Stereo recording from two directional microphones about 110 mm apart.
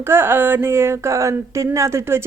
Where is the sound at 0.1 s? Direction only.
20° right (ahead or behind).